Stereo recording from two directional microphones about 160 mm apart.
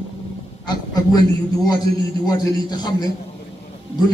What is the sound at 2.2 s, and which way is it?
Speech, 25° left (ahead or behind).